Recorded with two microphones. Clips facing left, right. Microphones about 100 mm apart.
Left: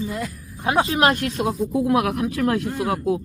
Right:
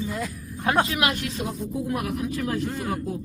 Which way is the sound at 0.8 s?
35° left (ahead or behind).